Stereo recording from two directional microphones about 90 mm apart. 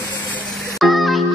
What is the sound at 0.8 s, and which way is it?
Music, centre (ahead or behind).